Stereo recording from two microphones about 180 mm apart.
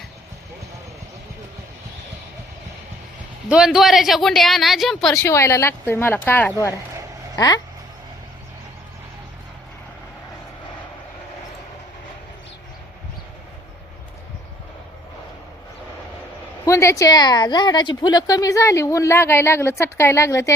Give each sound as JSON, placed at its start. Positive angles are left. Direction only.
{"t": 3.5, "sound": "a woman's voice", "side_deg": -5}
{"t": 5.1, "sound": "a woman's voice", "side_deg": 15}
{"t": 16.6, "sound": "a woman's voice", "side_deg": 15}